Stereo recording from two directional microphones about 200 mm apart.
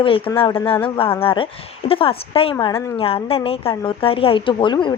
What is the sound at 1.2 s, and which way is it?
Speech, 25° left (ahead or behind).